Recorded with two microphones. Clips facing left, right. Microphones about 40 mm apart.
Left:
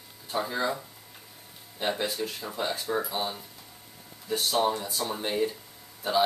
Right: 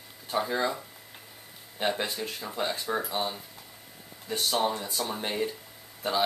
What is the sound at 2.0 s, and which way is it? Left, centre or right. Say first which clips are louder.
Speech: left 1 dB; centre.